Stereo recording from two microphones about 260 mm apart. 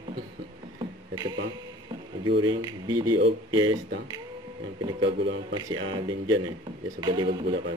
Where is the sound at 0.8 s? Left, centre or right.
Centre.